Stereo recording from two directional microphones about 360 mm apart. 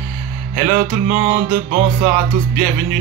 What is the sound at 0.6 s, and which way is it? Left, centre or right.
Music, right.